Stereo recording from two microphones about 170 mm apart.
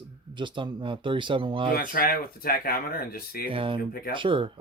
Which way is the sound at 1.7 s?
60° left (ahead or behind).